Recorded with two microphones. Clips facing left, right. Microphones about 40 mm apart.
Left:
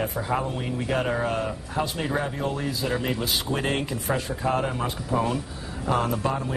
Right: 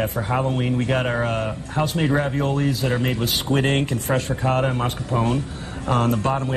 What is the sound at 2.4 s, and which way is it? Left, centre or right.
Speech, right.